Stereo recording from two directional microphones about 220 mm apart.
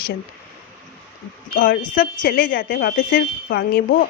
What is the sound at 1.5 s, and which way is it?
Speech, 40° left (ahead or behind).